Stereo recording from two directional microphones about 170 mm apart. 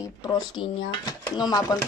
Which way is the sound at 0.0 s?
20° left (ahead or behind).